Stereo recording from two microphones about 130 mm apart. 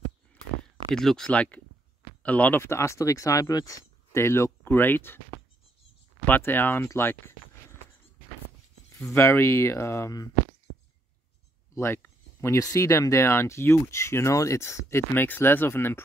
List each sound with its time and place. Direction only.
0.9 s speech: 5° left (ahead or behind)
6.2 s speech: 15° left (ahead or behind)
8.9 s speech: 20° left (ahead or behind)
11.7 s speech: 20° left (ahead or behind)